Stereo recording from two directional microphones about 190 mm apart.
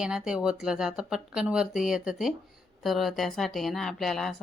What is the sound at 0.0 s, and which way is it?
Speech, 5° right (ahead or behind).